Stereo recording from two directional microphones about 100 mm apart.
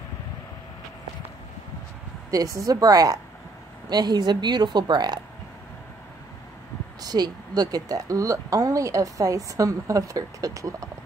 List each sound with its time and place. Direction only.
2.3 s a woman's voice: 35° right (ahead or behind)
7.0 s a woman's voice: 40° right (ahead or behind)